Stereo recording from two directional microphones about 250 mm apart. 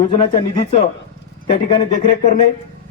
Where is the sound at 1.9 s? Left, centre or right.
Left.